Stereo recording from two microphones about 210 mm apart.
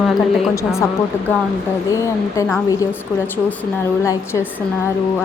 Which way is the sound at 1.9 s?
15° left (ahead or behind).